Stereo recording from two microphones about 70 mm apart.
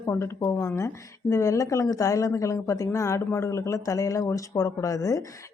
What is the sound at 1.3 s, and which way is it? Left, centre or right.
Speech, left.